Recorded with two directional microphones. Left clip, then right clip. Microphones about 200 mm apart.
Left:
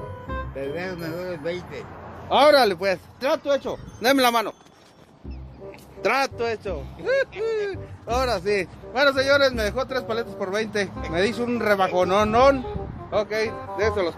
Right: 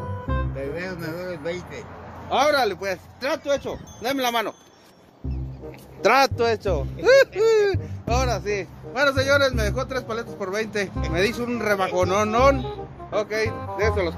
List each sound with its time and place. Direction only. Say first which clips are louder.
0.6 s a man's voice: even; 10° left (ahead or behind)
2.2 s speech: left 4 dB; 40° left (ahead or behind)
3.3 s speech: left 2 dB; 25° left (ahead or behind)
4.0 s speech: left 6 dB; 55° left (ahead or behind)
5.9 s speech: right 5 dB; 35° right (ahead or behind)
8.2 s speech: left 3 dB; 30° left (ahead or behind)
8.9 s a man's voice: left 1 dB; 15° left (ahead or behind)